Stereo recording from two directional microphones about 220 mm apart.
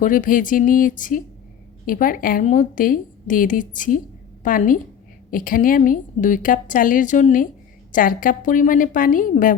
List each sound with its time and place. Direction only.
0.0 s a woman's voice: 35° left (ahead or behind)